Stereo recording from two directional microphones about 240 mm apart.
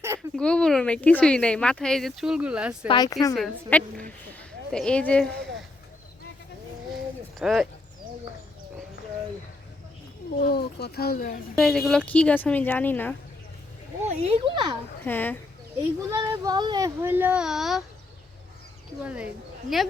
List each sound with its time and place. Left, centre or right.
0.3 s speech: centre
2.8 s speech: centre
3.3 s speech: centre
6.9 s a sound: centre
10.3 s speech: left
11.5 s speech: centre
14.0 s speech: right
15.0 s speech: centre
16.1 s speech: centre
19.0 s speech: centre